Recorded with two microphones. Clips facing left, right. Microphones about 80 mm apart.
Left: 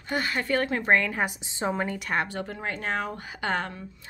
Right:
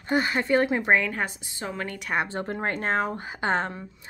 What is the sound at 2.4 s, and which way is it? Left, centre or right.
A woman's voice, right.